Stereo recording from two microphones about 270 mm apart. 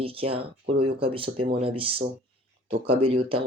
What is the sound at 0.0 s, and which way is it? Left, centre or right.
Speech, right.